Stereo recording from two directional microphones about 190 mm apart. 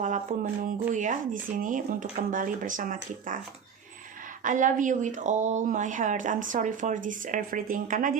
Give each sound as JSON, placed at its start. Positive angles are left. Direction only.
{"t": 0.0, "sound": "speech", "side_deg": -40}
{"t": 4.4, "sound": "speech", "side_deg": -40}